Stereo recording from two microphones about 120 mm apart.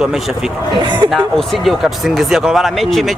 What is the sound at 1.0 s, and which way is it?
Speech, 5° left (ahead or behind).